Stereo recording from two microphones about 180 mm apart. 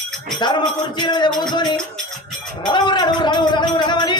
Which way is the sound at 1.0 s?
25° left (ahead or behind).